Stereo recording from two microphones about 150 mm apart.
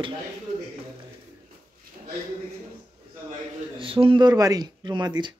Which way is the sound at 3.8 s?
35° right (ahead or behind).